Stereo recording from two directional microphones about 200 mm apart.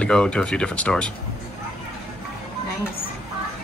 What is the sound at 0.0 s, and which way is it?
Speech, 5° left (ahead or behind).